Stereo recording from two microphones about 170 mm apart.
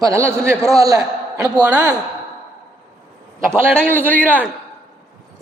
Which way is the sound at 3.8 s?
10° left (ahead or behind).